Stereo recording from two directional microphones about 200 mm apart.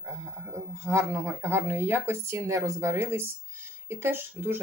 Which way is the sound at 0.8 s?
15° right (ahead or behind).